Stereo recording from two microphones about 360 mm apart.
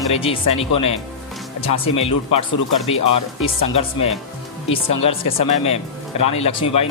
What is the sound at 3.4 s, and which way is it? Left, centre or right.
Speech, centre.